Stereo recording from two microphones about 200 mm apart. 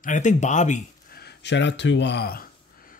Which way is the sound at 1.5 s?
65° left (ahead or behind).